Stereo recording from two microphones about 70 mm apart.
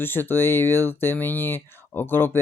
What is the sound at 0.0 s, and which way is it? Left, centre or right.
Speech, left.